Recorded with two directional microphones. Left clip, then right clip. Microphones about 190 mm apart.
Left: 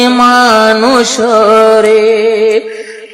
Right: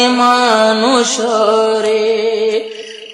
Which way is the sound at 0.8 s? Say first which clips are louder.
Left 4 dB; 15° left (ahead or behind).